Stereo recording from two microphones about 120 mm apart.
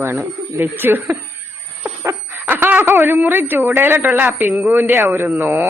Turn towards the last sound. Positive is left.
turn(degrees=-15)  # may be behind; listen again after turning